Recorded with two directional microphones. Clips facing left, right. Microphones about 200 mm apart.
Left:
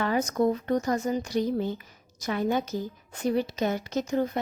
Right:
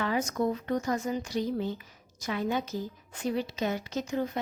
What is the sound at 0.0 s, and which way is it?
A woman's voice, 40° left (ahead or behind).